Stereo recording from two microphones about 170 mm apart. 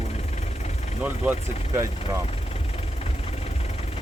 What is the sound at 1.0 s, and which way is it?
Speech, 10° right (ahead or behind).